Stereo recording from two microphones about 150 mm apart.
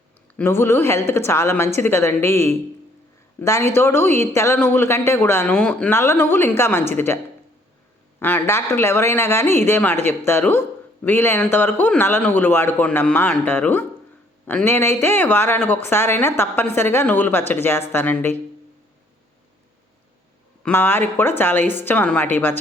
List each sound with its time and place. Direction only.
0.3 s speech: 15° left (ahead or behind)
8.2 s speech: 10° left (ahead or behind)
20.7 s speech: 15° left (ahead or behind)